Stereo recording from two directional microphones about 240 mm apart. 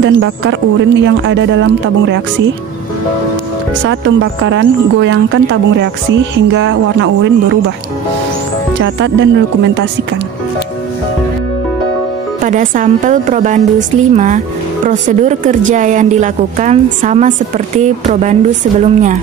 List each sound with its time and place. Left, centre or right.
0.0 s speech: right
3.8 s speech: right
8.8 s speech: right
12.4 s a woman's voice: right